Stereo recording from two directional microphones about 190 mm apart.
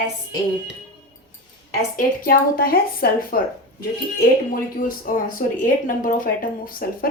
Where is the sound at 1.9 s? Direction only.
50° left (ahead or behind).